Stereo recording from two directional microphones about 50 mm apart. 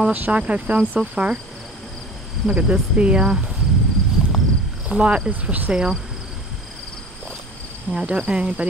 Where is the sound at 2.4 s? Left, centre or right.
Right.